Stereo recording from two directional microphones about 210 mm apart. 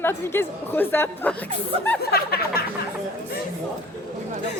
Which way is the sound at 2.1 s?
45° left (ahead or behind).